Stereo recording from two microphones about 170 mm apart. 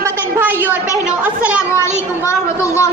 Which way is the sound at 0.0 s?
10° right (ahead or behind).